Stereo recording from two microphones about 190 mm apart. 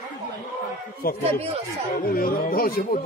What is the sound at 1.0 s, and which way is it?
A man's voice, 50° left (ahead or behind).